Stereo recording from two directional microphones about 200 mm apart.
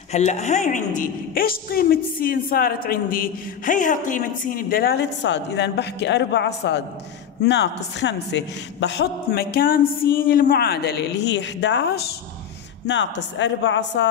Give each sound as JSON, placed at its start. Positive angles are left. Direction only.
{"t": 0.1, "sound": "a woman's voice", "side_deg": 35}